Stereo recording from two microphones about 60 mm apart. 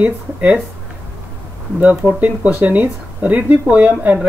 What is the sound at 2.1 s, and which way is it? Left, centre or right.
Speech, right.